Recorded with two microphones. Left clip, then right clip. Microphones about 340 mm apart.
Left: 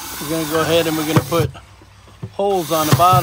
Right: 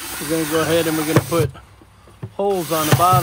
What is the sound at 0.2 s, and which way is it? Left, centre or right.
Speech, centre.